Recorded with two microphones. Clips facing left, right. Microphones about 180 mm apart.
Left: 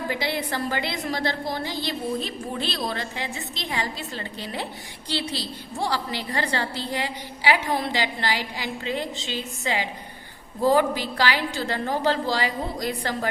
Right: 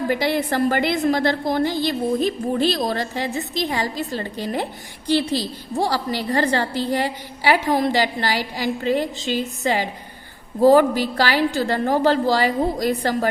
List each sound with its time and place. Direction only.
0.1 s a woman's voice: 50° right (ahead or behind)